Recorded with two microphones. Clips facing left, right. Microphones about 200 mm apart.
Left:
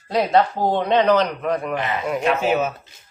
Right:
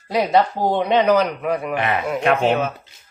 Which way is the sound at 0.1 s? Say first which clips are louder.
Even; 10° right (ahead or behind).